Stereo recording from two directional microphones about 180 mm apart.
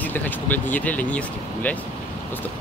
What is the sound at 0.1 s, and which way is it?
Speech, 10° left (ahead or behind).